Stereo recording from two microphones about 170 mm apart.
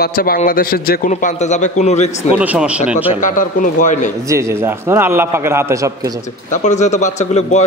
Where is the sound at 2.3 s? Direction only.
10° right (ahead or behind).